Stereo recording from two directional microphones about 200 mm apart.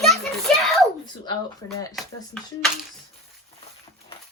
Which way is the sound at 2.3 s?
5° left (ahead or behind).